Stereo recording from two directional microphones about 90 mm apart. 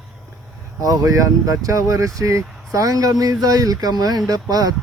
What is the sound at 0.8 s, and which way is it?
Speech, 40° right (ahead or behind).